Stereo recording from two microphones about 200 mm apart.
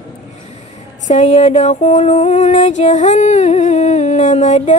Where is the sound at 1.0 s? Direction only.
35° left (ahead or behind).